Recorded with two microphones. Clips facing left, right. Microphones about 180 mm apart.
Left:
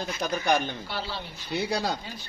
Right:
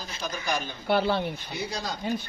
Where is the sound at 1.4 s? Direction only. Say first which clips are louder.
Left 5 dB; 65° left (ahead or behind).